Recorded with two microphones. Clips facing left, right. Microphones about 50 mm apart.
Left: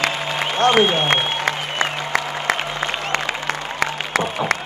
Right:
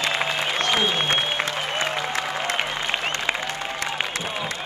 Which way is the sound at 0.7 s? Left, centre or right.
Left.